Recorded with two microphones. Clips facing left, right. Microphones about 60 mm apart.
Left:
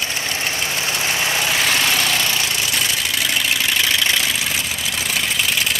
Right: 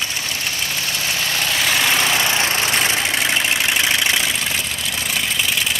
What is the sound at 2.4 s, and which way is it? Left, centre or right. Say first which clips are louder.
Vehicle: right 3 dB; right.